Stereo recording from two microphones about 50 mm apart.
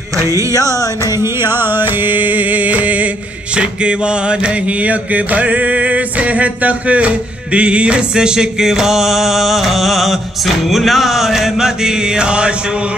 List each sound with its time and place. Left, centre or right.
0.2 s music: right
3.5 s mantra: right